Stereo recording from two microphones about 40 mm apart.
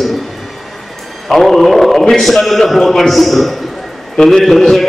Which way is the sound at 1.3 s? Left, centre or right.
Centre.